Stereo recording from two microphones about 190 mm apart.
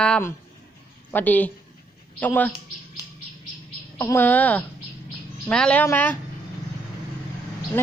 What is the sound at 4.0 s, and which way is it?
Speech, 15° left (ahead or behind).